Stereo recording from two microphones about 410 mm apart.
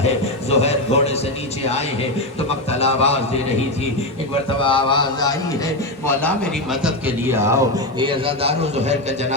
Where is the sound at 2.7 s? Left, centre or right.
Centre.